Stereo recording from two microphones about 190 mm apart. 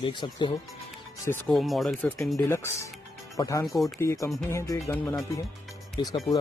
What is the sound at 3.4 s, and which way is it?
Speech, 20° left (ahead or behind).